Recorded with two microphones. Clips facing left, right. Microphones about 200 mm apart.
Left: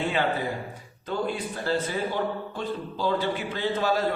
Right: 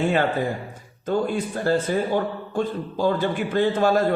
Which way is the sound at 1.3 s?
45° right (ahead or behind).